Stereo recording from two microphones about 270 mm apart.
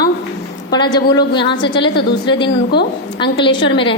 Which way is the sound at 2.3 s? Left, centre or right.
Left.